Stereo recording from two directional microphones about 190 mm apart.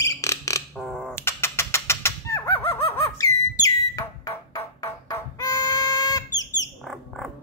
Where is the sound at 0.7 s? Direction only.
Centre (ahead or behind).